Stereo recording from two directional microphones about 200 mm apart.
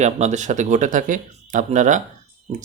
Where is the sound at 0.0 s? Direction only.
35° right (ahead or behind).